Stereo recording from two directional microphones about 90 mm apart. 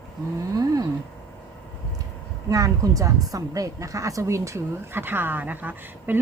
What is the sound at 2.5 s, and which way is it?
A woman's voice, 40° right (ahead or behind).